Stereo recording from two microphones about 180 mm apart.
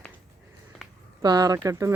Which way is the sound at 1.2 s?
20° right (ahead or behind).